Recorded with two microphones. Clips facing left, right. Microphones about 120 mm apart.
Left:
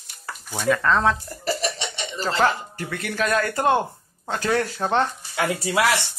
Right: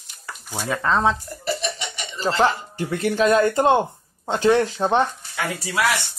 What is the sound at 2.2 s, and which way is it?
Speech, 20° right (ahead or behind).